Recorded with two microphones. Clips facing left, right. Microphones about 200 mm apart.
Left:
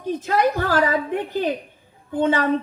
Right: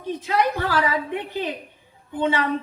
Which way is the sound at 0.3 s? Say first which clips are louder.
Left 2 dB; 50° left (ahead or behind).